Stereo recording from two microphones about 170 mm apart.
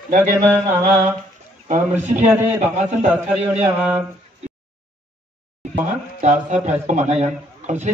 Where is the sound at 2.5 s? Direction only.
45° right (ahead or behind).